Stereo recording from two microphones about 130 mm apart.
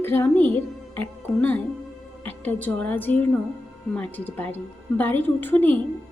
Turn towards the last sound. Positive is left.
turn(degrees=15)  # may be behind; listen again after turning